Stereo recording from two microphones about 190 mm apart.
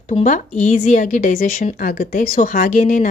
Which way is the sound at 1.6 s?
45° left (ahead or behind).